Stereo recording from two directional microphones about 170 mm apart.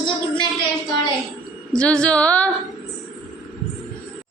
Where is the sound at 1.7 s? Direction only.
5° left (ahead or behind).